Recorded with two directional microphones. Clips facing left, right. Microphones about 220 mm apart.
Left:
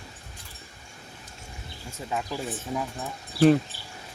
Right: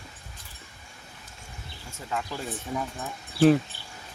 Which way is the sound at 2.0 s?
15° left (ahead or behind).